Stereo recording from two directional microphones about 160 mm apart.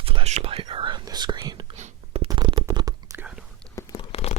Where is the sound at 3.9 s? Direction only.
40° left (ahead or behind).